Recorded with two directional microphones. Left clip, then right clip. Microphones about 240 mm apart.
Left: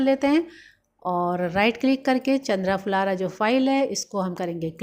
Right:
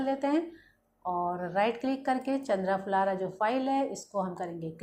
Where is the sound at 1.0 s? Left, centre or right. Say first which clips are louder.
Left 6 dB; left.